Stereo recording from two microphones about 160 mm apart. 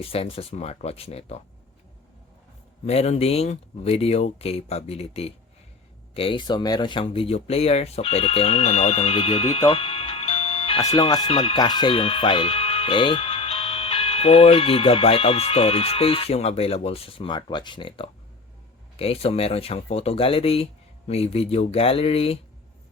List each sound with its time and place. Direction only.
0.0 s speech: 35° left (ahead or behind)
2.8 s speech: 40° left (ahead or behind)